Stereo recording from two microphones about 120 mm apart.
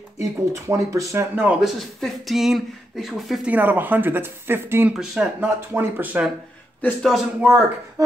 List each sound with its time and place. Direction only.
0.2 s speech: 25° right (ahead or behind)
1.6 s speech: centre (ahead or behind)
3.4 s speech: 15° right (ahead or behind)
4.9 s speech: 5° right (ahead or behind)
5.4 s speech: 15° right (ahead or behind)
7.0 s speech: centre (ahead or behind)